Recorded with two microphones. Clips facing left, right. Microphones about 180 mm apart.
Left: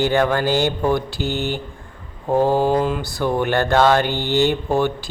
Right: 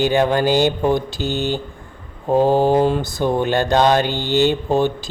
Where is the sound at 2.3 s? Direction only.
15° right (ahead or behind).